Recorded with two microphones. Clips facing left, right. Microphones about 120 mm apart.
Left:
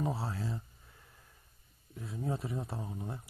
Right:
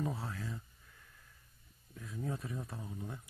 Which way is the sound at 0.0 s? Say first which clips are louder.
Left 4 dB; 30° left (ahead or behind).